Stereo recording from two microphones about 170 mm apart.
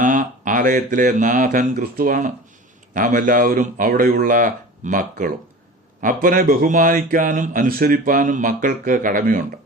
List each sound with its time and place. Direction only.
0.0 s speech: 50° right (ahead or behind)